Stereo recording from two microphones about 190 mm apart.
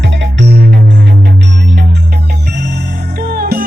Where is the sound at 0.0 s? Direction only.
75° right (ahead or behind).